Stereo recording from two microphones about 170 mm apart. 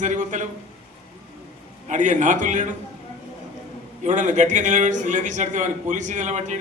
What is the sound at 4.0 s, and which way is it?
A man's voice, 45° right (ahead or behind).